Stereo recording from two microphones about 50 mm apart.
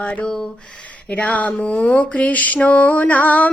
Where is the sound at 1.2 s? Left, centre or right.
Left.